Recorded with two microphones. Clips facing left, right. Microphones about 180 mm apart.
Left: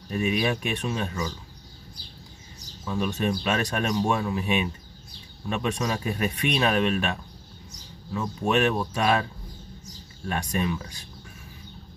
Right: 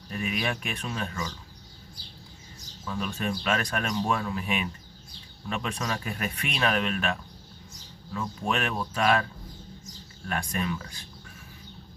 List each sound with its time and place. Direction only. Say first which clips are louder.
0.1 s speech: left 6 dB; 25° left (ahead or behind)
2.9 s speech: left 5 dB; 20° left (ahead or behind)
10.2 s speech: left 3 dB; 25° left (ahead or behind)